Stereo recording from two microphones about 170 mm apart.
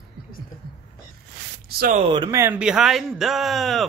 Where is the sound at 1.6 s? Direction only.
60° right (ahead or behind).